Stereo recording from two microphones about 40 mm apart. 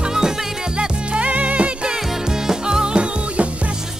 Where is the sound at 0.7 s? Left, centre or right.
Right.